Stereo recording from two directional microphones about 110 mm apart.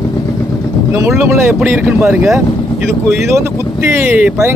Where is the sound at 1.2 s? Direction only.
25° right (ahead or behind).